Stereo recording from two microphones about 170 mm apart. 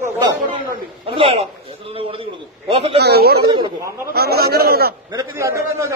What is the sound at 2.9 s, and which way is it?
Speech, 70° right (ahead or behind).